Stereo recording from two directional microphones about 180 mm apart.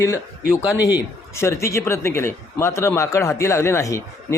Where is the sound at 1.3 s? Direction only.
15° left (ahead or behind).